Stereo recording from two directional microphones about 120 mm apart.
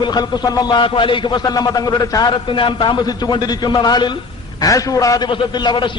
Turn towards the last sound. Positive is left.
turn(degrees=40)  # may be behind; listen again after turning